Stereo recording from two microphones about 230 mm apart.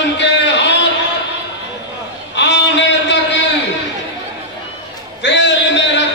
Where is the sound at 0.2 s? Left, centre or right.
Left.